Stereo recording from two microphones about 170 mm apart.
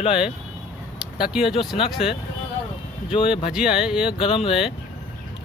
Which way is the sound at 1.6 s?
30° left (ahead or behind).